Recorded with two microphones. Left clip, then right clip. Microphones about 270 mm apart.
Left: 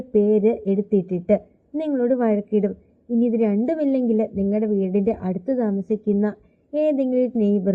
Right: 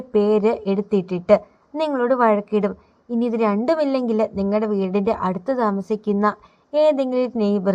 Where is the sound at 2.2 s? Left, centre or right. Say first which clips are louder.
Right 4 dB; right.